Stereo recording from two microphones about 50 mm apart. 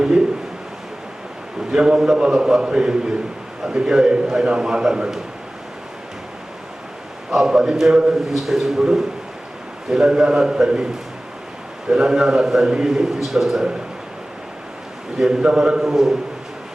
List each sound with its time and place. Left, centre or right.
1.7 s a man's voice: centre
7.3 s a man's voice: centre
11.9 s a man's voice: centre
15.2 s a man's voice: centre